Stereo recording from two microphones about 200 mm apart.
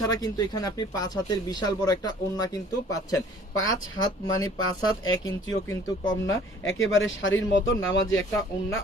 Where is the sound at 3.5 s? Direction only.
80° left.